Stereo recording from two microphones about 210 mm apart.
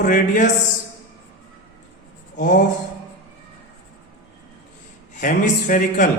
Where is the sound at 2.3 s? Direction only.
40° left (ahead or behind).